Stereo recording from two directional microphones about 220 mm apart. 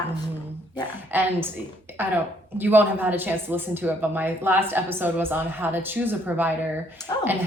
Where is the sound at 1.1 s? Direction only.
10° right (ahead or behind).